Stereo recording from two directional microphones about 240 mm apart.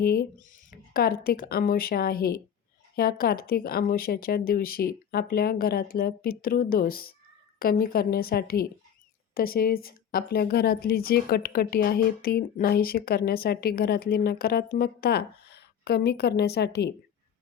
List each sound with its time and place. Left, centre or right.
0.0 s a woman's voice: left